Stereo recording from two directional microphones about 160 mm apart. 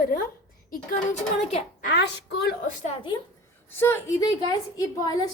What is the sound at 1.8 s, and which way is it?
Speech, 80° left.